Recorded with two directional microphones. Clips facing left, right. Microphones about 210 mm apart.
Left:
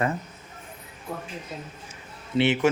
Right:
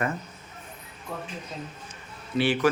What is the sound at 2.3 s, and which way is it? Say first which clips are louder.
Speech: left 2 dB; 25° left (ahead or behind).